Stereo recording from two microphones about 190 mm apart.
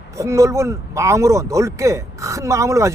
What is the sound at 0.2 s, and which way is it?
Speech, 15° right (ahead or behind).